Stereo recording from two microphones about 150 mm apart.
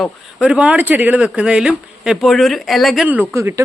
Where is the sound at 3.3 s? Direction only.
20° right (ahead or behind).